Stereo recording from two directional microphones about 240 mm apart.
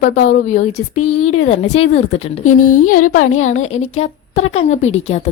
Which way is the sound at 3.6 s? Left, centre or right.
Left.